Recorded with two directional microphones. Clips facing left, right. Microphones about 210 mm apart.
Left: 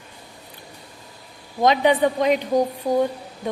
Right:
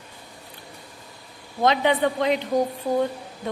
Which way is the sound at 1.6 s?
15° left (ahead or behind).